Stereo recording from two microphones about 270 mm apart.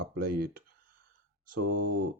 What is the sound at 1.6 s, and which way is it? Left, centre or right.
Speech, right.